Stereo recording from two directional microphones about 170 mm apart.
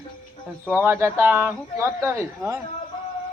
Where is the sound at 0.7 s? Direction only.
15° right (ahead or behind).